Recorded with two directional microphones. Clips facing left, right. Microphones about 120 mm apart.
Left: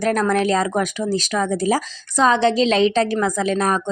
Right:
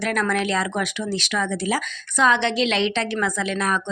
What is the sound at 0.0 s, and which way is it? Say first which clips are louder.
A woman's voice: left 5 dB; 40° left (ahead or behind).